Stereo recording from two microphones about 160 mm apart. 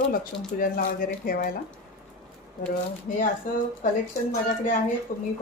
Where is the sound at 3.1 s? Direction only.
60° left (ahead or behind).